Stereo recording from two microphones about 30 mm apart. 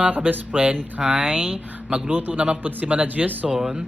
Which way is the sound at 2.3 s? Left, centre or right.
Right.